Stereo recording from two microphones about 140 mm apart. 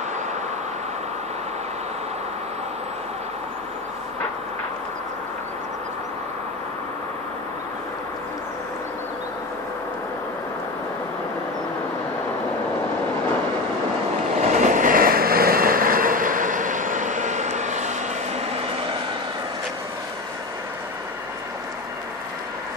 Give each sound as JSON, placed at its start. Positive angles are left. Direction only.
{"t": 14.4, "sound": "vehicle", "side_deg": -65}